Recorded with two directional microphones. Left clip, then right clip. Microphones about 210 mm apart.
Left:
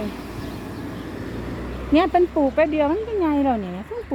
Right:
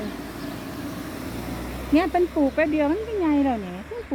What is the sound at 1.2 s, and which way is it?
Vehicle, 50° right (ahead or behind).